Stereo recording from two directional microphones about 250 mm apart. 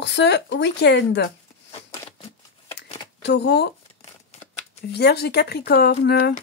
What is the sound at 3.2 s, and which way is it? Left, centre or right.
Speech, left.